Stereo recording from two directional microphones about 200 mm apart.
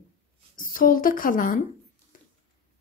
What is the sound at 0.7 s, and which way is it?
Speech, 45° left (ahead or behind).